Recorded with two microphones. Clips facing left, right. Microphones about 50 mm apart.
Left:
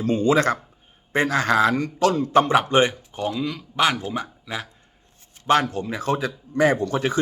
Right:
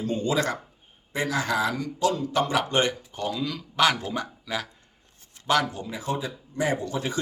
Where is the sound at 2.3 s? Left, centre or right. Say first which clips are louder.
Left 7 dB; left; by 4.7 s centre.